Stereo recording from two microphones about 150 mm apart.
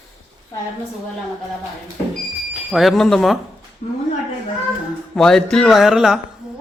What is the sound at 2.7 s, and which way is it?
Music, centre (ahead or behind).